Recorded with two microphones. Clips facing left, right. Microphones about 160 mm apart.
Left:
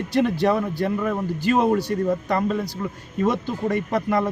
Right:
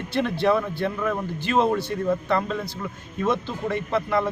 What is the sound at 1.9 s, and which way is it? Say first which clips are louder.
Speech: left 1 dB; 40° left (ahead or behind).